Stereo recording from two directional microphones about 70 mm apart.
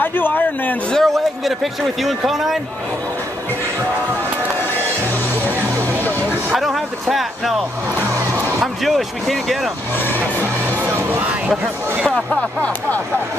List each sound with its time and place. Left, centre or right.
0.0 s a sound: left
0.9 s a man's voice: centre
6.5 s speech: centre
8.5 s speech: centre
10.1 s music: right
11.4 s speech: centre
12.3 s speech: centre